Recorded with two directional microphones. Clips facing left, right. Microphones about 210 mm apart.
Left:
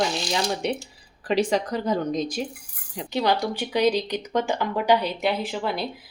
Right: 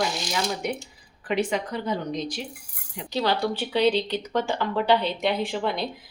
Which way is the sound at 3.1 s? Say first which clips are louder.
Left 1 dB; 15° left (ahead or behind).